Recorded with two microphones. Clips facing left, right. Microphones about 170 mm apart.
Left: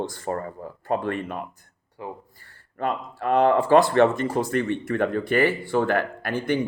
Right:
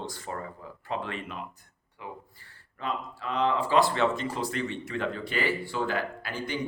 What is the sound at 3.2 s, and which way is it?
Speech, 55° left (ahead or behind).